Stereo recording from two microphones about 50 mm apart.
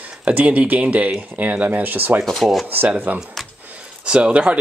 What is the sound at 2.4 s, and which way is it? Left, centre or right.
Speech, centre.